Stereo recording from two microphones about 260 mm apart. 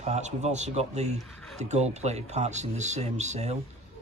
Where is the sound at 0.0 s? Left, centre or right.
Right.